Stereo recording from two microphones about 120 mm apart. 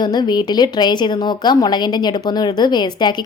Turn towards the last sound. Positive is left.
turn(degrees=40)  # may be behind; listen again after turning